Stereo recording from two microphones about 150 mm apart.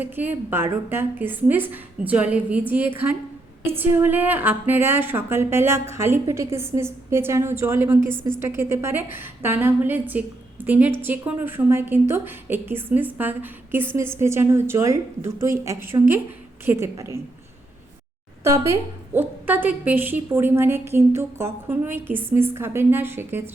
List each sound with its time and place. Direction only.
0.0 s a woman's voice: 10° right (ahead or behind)
18.4 s a woman's voice: 20° right (ahead or behind)